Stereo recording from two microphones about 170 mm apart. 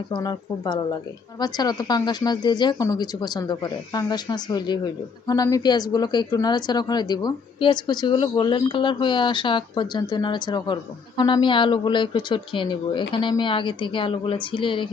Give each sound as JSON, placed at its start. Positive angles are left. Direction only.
{"t": 0.1, "sound": "speech", "side_deg": 25}